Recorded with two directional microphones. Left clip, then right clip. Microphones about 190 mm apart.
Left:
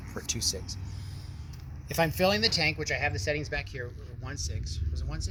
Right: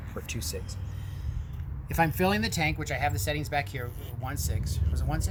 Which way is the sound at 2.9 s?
5° right (ahead or behind).